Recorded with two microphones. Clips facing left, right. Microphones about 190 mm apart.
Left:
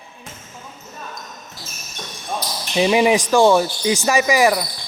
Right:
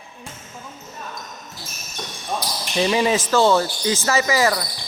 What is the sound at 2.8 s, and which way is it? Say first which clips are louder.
Speech: left 4 dB; 15° left (ahead or behind).